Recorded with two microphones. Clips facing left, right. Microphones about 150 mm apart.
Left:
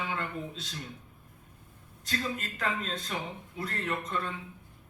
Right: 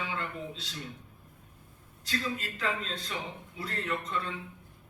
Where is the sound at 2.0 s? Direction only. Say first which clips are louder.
Even; 50° left (ahead or behind).